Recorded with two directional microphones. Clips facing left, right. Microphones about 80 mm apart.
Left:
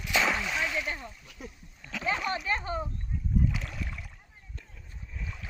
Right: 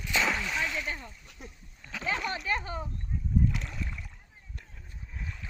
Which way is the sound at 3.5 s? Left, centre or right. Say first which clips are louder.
Even; centre.